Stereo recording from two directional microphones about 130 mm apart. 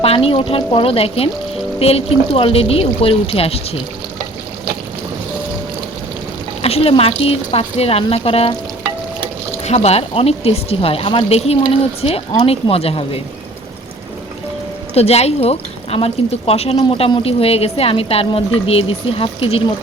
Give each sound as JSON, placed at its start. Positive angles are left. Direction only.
{"t": 0.0, "sound": "a woman's voice", "side_deg": 45}
{"t": 6.6, "sound": "a woman's voice", "side_deg": 50}
{"t": 9.6, "sound": "a woman's voice", "side_deg": 55}
{"t": 14.9, "sound": "a woman's voice", "side_deg": 50}
{"t": 16.8, "sound": "a woman's voice", "side_deg": 40}